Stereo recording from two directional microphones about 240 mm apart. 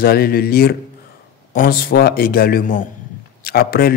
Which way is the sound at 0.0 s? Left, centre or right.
Left.